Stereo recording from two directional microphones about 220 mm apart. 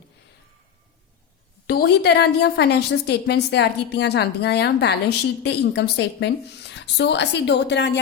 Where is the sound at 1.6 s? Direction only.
45° left (ahead or behind).